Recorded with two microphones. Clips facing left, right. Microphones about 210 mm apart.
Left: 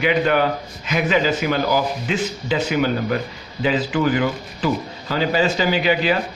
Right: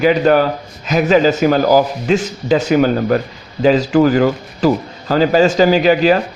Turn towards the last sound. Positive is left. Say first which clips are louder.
# right 7 dB
turn(degrees=-40)  # may be behind; listen again after turning